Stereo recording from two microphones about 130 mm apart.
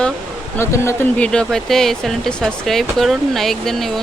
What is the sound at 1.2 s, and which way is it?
Speech, 5° left (ahead or behind).